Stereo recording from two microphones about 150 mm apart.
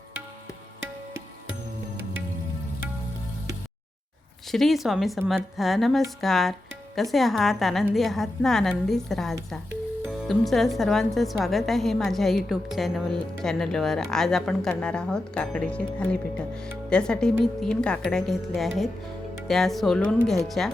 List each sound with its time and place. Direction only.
4.5 s a woman's voice: centre (ahead or behind)